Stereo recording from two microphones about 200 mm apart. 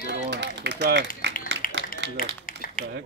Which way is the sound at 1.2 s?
60° right (ahead or behind).